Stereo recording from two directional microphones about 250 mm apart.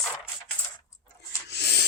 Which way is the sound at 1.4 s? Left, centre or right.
Left.